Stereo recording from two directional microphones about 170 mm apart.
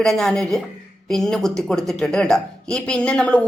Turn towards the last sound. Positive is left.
turn(degrees=5)  # may be behind; listen again after turning